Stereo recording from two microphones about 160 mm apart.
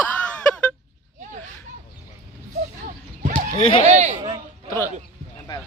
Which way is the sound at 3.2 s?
50° right (ahead or behind).